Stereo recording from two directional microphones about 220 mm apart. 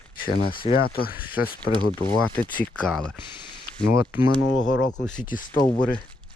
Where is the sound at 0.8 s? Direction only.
45° left (ahead or behind).